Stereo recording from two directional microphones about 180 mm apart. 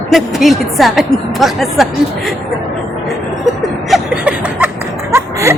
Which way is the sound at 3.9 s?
5° right (ahead or behind).